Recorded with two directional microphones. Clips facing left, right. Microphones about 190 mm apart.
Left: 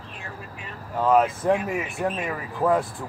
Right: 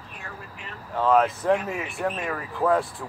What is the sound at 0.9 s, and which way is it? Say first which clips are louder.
Speech: left 1 dB; 5° left (ahead or behind).